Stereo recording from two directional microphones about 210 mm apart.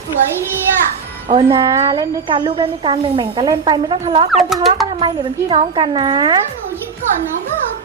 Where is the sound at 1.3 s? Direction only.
20° right (ahead or behind).